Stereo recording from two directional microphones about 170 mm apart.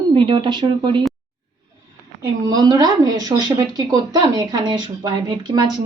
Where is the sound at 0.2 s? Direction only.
30° right (ahead or behind).